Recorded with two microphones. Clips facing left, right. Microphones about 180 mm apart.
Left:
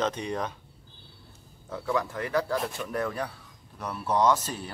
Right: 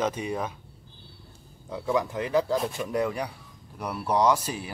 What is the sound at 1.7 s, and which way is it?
Speech, 15° right (ahead or behind).